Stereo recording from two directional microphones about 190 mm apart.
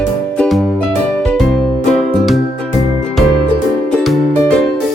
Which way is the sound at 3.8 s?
Centre (ahead or behind).